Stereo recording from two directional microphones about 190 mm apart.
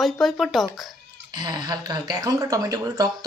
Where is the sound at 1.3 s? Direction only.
20° right (ahead or behind).